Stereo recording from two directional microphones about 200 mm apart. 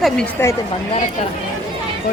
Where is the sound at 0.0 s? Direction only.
5° left (ahead or behind).